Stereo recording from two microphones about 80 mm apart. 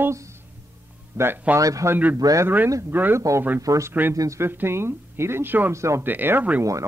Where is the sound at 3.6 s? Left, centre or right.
Right.